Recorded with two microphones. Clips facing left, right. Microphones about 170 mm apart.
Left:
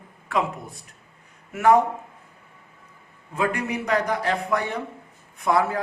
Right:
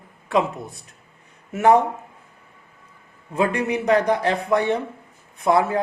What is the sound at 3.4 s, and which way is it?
A man's voice, 25° right (ahead or behind).